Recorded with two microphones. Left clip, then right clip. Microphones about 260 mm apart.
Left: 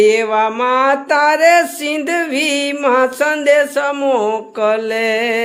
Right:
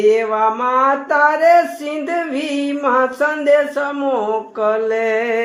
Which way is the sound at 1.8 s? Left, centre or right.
Left.